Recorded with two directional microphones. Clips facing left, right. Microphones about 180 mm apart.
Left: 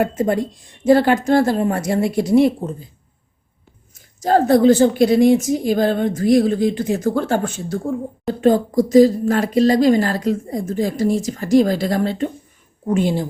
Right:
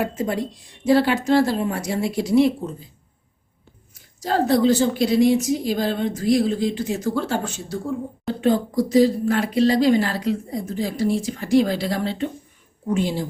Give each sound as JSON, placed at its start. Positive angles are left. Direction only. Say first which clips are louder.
{"t": 0.0, "sound": "a woman's voice", "louder": "left 5 dB", "side_deg": 50}
{"t": 3.9, "sound": "a woman's voice", "louder": "left 6 dB", "side_deg": 50}